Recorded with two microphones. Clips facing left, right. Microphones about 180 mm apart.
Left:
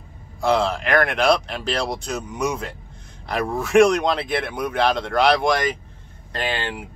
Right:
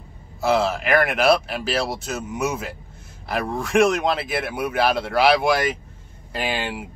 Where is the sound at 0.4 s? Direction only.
5° right (ahead or behind).